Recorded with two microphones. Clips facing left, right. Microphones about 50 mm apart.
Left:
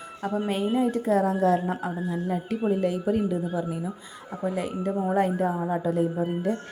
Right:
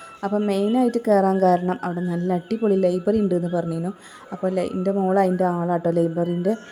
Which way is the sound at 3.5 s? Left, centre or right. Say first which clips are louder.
Right 5 dB; right.